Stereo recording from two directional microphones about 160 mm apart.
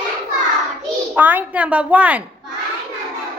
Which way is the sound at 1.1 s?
10° right (ahead or behind).